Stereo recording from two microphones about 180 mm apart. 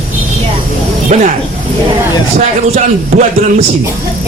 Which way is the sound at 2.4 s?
40° right (ahead or behind).